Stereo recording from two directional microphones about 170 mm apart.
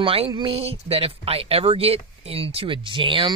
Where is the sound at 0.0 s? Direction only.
30° right (ahead or behind).